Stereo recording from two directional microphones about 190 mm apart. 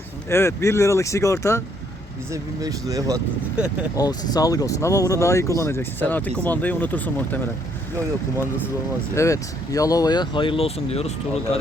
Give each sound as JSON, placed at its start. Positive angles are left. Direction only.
{"t": 0.3, "sound": "speech", "side_deg": 15}
{"t": 2.3, "sound": "speech", "side_deg": -20}
{"t": 3.9, "sound": "speech", "side_deg": 20}
{"t": 9.1, "sound": "speech", "side_deg": 15}